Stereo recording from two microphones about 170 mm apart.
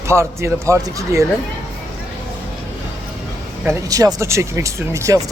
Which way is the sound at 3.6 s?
20° right (ahead or behind).